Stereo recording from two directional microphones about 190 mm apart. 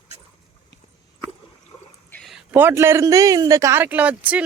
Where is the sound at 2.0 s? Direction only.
10° left (ahead or behind).